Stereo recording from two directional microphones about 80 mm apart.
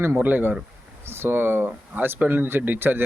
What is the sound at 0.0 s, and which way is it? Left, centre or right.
Speech, right.